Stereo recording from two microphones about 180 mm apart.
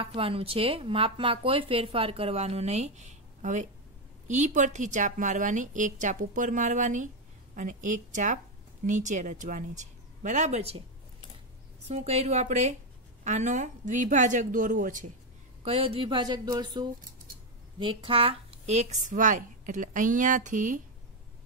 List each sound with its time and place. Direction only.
0.0 s a woman's voice: 30° right (ahead or behind)
11.9 s a woman's voice: 35° right (ahead or behind)
15.6 s a woman's voice: 30° right (ahead or behind)